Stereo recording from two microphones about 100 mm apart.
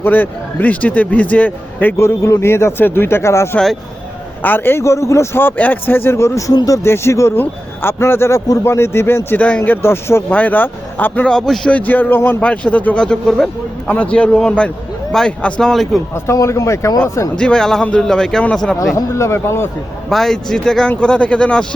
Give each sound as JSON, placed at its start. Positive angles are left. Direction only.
{"t": 0.0, "sound": "a man's voice", "side_deg": 20}
{"t": 6.5, "sound": "speech", "side_deg": 40}
{"t": 6.8, "sound": "a man's voice", "side_deg": 25}
{"t": 9.8, "sound": "a man's voice", "side_deg": 25}
{"t": 11.3, "sound": "speech", "side_deg": 5}
{"t": 11.7, "sound": "speech", "side_deg": 15}
{"t": 16.1, "sound": "a man's voice", "side_deg": 30}
{"t": 17.3, "sound": "speech", "side_deg": 10}
{"t": 18.9, "sound": "a man's voice", "side_deg": 30}
{"t": 20.1, "sound": "speech", "side_deg": 5}